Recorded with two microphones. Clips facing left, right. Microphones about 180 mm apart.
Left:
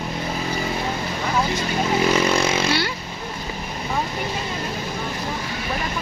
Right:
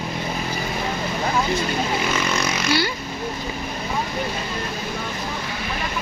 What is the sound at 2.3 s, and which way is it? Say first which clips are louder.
Vehicle: left 2 dB; 30° left (ahead or behind).